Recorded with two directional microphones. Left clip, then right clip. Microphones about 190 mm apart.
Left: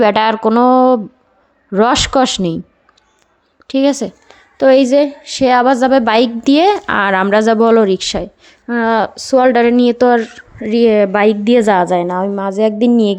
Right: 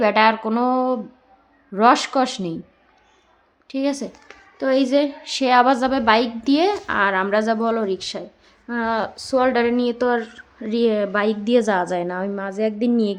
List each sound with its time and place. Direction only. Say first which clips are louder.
0.0 s a woman's voice: left 5 dB; 45° left (ahead or behind)
3.7 s a woman's voice: left 10 dB; 45° left (ahead or behind)